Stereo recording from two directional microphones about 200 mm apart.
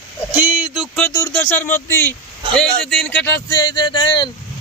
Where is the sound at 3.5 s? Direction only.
20° left (ahead or behind).